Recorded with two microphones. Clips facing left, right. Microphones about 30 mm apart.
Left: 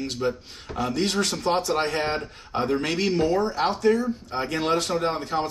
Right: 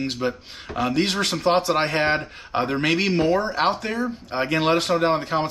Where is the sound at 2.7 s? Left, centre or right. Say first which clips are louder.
Right 2 dB; right.